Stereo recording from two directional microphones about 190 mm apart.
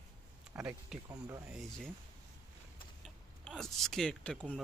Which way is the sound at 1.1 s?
20° right (ahead or behind).